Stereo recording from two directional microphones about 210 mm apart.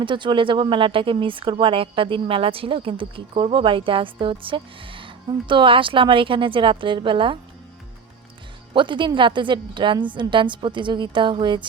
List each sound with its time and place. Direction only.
0.0 s speech: 25° right (ahead or behind)
8.7 s speech: 20° right (ahead or behind)